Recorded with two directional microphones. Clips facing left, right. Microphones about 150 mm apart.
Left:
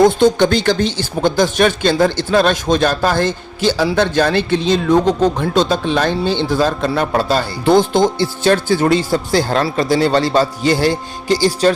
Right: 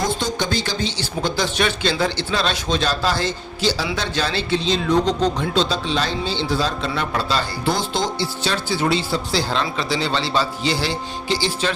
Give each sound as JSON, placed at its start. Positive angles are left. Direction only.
{"t": 0.0, "sound": "speech", "side_deg": 60}